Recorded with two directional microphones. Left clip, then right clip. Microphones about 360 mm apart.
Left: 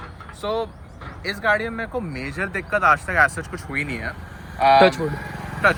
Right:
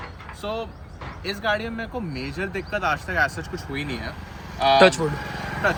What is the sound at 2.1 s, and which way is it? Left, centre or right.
Speech, left.